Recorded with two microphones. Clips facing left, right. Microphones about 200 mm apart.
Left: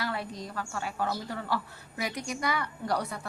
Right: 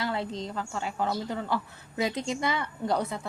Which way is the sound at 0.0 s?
25° right (ahead or behind).